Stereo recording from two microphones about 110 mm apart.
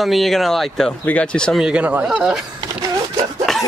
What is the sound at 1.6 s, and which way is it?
Speech, 10° right (ahead or behind).